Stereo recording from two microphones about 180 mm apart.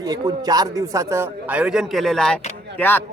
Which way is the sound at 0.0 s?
20° right (ahead or behind).